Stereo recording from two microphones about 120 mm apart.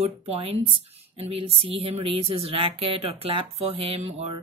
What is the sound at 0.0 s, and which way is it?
Speech, 55° right (ahead or behind).